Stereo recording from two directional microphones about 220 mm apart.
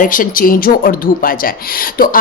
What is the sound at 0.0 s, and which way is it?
A woman's voice, 40° left (ahead or behind).